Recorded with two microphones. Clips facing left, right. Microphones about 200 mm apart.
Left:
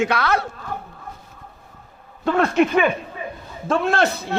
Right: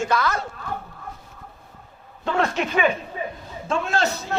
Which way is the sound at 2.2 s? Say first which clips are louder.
Left 6 dB; 55° left (ahead or behind).